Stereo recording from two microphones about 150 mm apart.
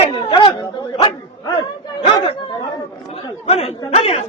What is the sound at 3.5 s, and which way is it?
Speech, 40° left (ahead or behind).